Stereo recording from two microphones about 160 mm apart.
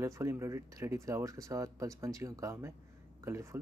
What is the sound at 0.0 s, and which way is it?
Speech, 20° right (ahead or behind).